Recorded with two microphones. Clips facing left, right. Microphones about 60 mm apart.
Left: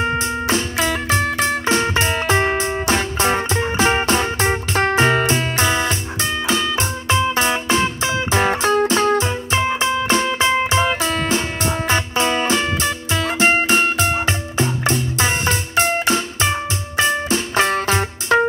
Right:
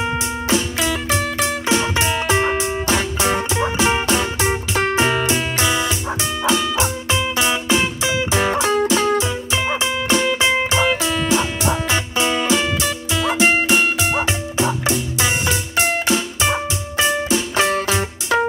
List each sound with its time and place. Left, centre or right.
0.5 s music: left